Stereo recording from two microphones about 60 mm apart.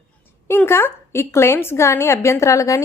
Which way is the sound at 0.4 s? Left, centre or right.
Left.